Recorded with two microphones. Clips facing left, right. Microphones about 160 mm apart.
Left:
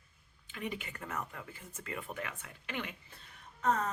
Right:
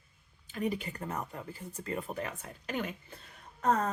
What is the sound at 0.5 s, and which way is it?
Speech, 40° right (ahead or behind).